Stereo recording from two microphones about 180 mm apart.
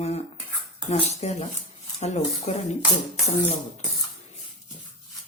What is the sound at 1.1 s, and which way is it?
Dishes, 35° left (ahead or behind).